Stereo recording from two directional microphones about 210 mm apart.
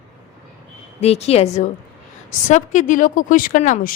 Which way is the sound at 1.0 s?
30° left (ahead or behind).